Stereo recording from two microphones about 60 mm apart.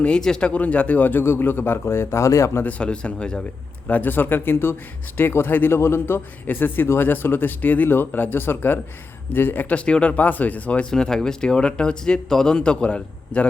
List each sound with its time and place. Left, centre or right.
0.0 s speech: centre; by 2.6 s left
2.6 s speech: centre
3.8 s speech: left
10.9 s speech: centre